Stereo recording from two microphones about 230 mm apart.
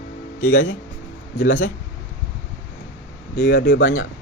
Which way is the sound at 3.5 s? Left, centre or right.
Left.